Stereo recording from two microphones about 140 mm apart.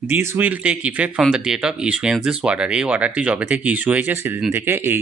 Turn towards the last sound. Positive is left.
turn(degrees=-15)  # may be behind; listen again after turning